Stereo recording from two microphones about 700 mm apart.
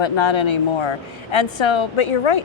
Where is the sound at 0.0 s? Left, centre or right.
Left.